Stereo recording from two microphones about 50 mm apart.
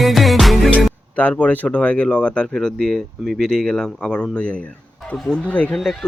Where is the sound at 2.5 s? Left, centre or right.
Centre.